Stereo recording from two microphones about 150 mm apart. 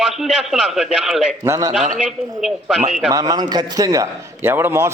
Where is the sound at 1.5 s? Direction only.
25° right (ahead or behind).